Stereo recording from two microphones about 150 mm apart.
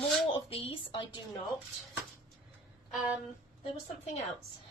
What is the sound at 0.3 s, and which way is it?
Speech, 40° left (ahead or behind).